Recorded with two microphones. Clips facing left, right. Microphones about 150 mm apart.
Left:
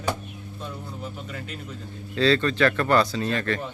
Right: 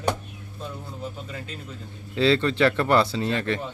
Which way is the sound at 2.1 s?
20° right (ahead or behind).